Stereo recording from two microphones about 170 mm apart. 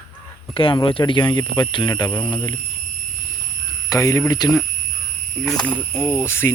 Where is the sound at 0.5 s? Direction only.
30° left (ahead or behind).